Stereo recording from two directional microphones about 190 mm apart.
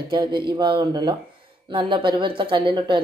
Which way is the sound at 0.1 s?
25° right (ahead or behind).